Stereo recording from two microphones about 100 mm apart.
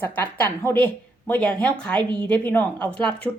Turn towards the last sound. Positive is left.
turn(degrees=10)  # may be behind; listen again after turning